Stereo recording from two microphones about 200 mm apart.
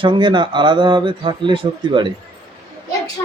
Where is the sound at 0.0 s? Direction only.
25° right (ahead or behind).